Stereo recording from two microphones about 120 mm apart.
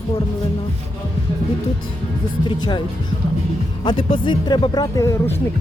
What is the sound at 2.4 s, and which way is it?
Speech, 40° left (ahead or behind).